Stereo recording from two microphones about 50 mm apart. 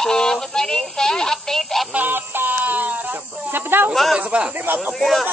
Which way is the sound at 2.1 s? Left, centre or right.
Right.